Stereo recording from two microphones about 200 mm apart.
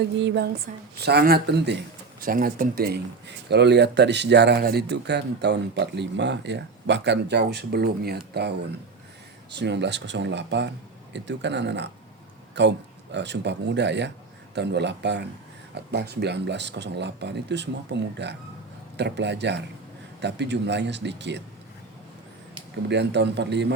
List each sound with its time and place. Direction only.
0.2 s speech: 60° right (ahead or behind)
0.7 s a woman's voice: 40° right (ahead or behind); by 1.8 s 55° right (ahead or behind)
2.2 s speech: 45° right (ahead or behind)
22.9 s speech: 60° right (ahead or behind)